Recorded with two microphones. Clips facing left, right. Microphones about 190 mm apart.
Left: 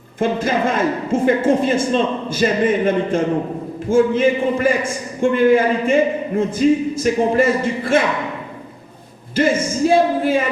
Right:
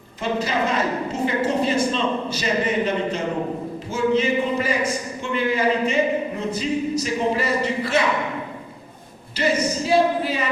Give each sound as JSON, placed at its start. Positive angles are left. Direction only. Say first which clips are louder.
{"t": 0.2, "sound": "a woman's voice", "louder": "left 5 dB", "side_deg": 50}
{"t": 9.3, "sound": "a woman's voice", "louder": "left 4 dB", "side_deg": 50}